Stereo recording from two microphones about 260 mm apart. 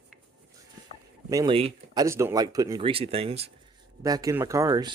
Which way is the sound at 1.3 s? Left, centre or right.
Centre.